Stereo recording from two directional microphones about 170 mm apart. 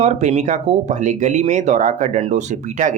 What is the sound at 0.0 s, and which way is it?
Speech, 40° right (ahead or behind).